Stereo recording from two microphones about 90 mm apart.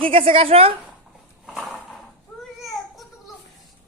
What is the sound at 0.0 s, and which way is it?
Speech, 90° right.